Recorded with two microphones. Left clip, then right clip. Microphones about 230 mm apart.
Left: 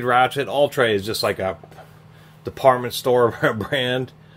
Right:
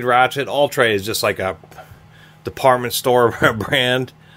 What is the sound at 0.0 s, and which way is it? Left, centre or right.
Speech, centre.